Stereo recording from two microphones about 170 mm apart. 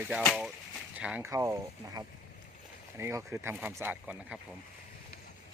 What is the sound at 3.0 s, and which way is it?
Speech, 15° right (ahead or behind).